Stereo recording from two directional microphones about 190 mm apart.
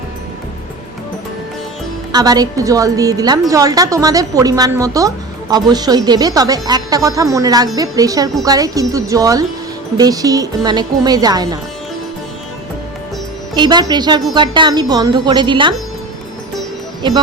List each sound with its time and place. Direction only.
2.1 s speech: 20° right (ahead or behind)
13.5 s speech: 20° right (ahead or behind)